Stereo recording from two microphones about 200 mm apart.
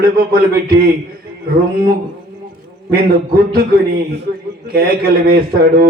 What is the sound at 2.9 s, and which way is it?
Speech, 50° right (ahead or behind).